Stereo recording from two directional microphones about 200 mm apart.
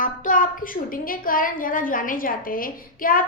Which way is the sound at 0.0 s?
40° left (ahead or behind).